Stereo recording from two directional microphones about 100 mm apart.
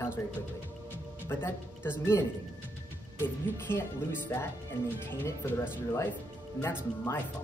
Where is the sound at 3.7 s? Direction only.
25° left (ahead or behind).